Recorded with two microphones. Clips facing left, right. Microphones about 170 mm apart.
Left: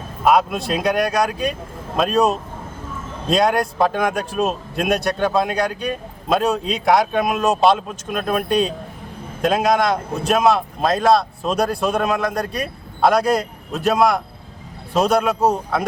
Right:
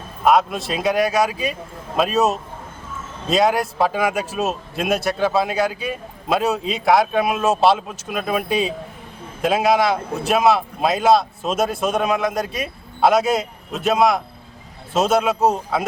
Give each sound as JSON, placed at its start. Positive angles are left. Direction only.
{"t": 0.3, "sound": "speech", "side_deg": 0}